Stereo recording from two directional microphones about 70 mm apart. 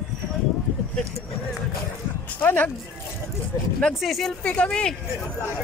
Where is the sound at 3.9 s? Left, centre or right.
Centre.